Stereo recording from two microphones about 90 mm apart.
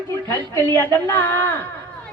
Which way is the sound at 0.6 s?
20° left (ahead or behind).